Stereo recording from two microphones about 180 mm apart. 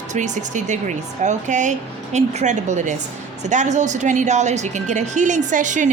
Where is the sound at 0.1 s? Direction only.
40° right (ahead or behind).